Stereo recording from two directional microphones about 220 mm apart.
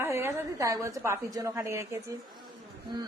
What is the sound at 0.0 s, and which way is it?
A woman's voice, 10° right (ahead or behind).